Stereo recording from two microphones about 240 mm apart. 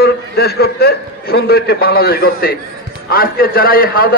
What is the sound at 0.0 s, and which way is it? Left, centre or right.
A man's voice, left.